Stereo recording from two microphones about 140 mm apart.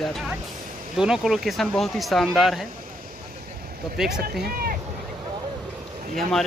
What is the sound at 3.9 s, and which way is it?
Speech, 5° right (ahead or behind).